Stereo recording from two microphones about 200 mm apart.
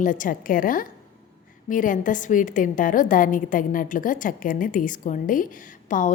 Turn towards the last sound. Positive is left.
turn(degrees=40)  # may be behind; listen again after turning